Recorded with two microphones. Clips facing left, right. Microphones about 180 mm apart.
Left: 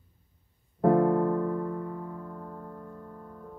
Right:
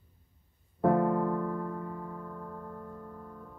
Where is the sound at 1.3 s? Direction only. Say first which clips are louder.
Left 4 dB; 10° left (ahead or behind).